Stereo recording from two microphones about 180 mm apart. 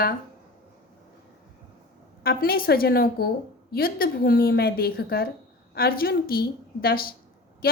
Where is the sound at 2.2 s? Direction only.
55° left (ahead or behind).